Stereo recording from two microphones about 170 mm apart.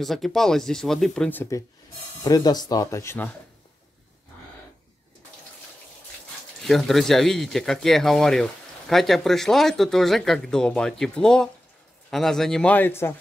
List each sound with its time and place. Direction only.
0.0 s speech: centre (ahead or behind)
2.2 s speech: 25° left (ahead or behind)
6.6 s speech: centre (ahead or behind)